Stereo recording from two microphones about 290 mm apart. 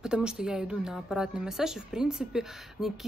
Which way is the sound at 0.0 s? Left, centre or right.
Centre.